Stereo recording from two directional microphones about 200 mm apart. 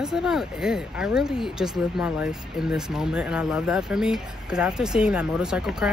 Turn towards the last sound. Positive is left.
turn(degrees=0)  # may be behind; listen again after turning